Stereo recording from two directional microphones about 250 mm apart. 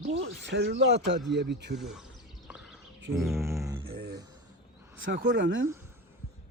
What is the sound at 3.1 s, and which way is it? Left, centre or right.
Speech, centre.